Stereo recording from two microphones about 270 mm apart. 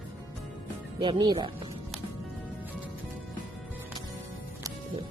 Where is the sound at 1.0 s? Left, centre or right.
Centre.